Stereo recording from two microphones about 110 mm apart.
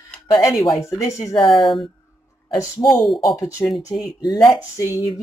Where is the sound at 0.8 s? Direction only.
25° left (ahead or behind).